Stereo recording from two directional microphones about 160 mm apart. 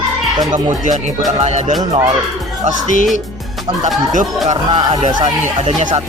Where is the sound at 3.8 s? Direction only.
50° right (ahead or behind).